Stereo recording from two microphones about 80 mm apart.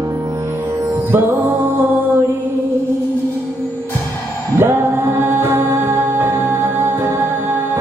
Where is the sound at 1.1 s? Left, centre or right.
Right.